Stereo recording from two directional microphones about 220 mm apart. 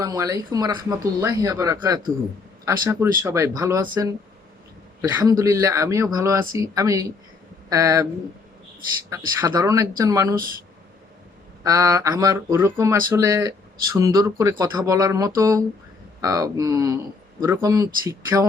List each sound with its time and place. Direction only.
0.0 s speech: 15° right (ahead or behind)
9.0 s speech: 15° right (ahead or behind)
11.6 s speech: 15° right (ahead or behind)